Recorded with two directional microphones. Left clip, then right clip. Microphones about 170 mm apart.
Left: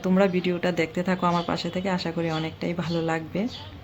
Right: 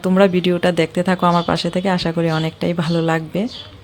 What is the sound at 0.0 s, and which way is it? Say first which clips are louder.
Speech: right 8 dB; 30° right (ahead or behind).